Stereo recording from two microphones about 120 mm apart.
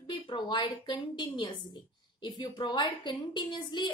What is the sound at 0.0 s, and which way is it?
A woman's voice, 45° left (ahead or behind).